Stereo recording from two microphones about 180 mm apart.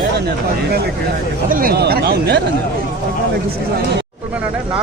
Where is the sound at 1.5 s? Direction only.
55° right (ahead or behind).